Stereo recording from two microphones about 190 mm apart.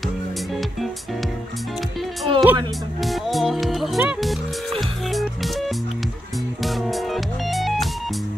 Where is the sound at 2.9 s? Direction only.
Centre (ahead or behind).